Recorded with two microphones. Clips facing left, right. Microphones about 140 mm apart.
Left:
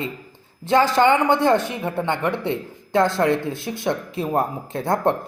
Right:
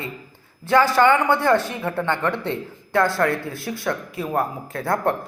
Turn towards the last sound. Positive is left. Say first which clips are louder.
# left 2 dB
turn(degrees=25)  # may be behind; listen again after turning